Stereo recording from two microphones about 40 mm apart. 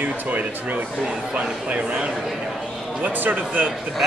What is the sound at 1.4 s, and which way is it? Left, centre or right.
Speech, right.